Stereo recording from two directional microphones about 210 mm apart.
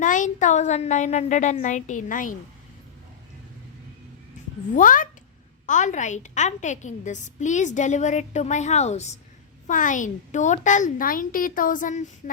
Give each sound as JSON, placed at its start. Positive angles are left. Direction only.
{"t": 0.0, "sound": "a woman's voice", "side_deg": 35}
{"t": 4.7, "sound": "a woman's voice", "side_deg": 40}